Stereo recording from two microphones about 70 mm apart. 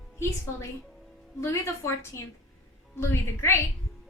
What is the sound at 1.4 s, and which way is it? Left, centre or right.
A woman's voice, left.